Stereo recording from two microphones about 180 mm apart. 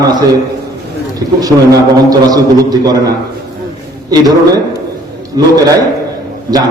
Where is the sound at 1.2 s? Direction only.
20° right (ahead or behind).